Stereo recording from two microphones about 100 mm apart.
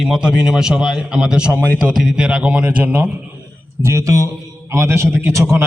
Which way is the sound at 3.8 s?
30° right (ahead or behind).